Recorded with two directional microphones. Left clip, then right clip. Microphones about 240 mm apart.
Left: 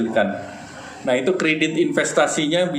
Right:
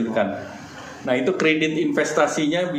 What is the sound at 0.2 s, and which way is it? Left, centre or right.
Speech, left.